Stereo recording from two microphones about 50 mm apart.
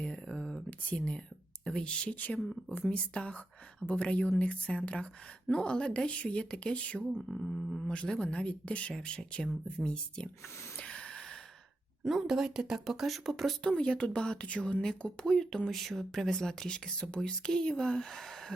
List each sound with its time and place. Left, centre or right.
0.3 s a sound: centre
0.7 s speech: left
2.1 s speech: left
2.9 s speech: left
7.3 s a sound: centre
7.9 s speech: left
10.8 s a sound: left
12.0 s speech: centre
13.7 s speech: centre
14.8 s speech: centre